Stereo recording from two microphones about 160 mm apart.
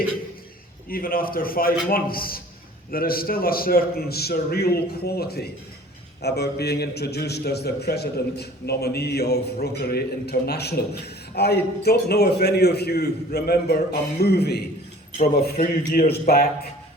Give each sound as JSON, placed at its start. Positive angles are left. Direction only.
{"t": 0.9, "sound": "a man's voice", "side_deg": 65}
{"t": 6.2, "sound": "a man's voice", "side_deg": 90}
{"t": 15.2, "sound": "a man's voice", "side_deg": 65}